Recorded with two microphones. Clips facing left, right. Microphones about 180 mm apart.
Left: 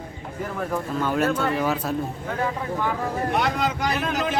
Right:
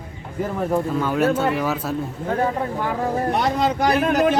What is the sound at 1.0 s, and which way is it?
Speech, 5° right (ahead or behind).